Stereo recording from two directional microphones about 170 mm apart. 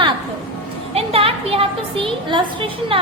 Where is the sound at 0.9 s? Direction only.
35° right (ahead or behind).